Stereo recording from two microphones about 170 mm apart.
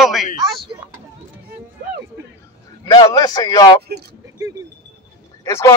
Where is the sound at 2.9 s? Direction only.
25° left (ahead or behind).